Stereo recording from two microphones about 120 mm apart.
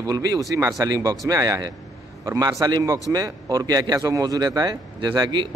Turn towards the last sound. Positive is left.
turn(degrees=-40)  # may be behind; listen again after turning